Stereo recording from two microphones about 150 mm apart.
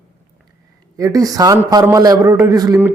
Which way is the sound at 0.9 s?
25° right (ahead or behind).